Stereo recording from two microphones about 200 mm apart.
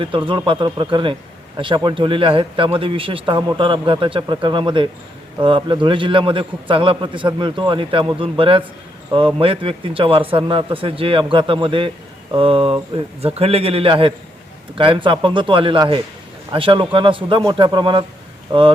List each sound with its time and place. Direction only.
0.0 s a man's voice: 25° right (ahead or behind)